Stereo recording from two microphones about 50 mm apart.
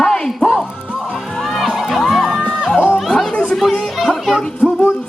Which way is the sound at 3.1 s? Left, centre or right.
Centre.